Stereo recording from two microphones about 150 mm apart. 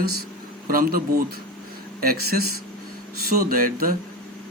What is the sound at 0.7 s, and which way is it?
Speech, 70° right (ahead or behind).